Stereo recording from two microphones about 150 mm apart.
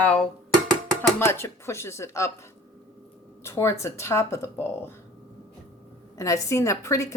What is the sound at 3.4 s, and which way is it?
A woman's voice, 20° left (ahead or behind).